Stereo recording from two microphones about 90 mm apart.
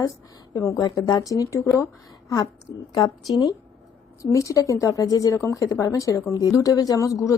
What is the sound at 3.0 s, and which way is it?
Speech, 45° left (ahead or behind).